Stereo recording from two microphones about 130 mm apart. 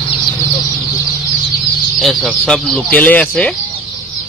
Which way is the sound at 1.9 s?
5° left (ahead or behind).